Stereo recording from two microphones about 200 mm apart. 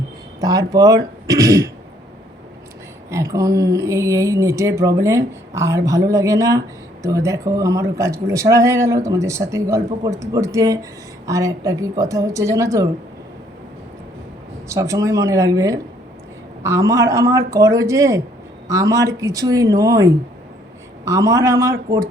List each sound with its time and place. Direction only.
0.3 s speech: 20° right (ahead or behind)
3.1 s speech: 15° right (ahead or behind)
14.7 s speech: 15° right (ahead or behind)